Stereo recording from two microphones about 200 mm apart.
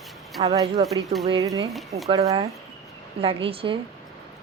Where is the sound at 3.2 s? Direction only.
25° right (ahead or behind).